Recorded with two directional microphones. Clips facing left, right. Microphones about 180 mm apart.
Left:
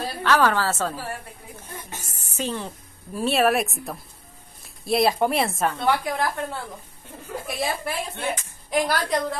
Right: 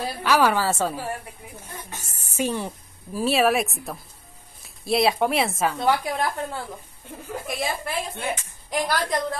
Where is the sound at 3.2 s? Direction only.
Centre (ahead or behind).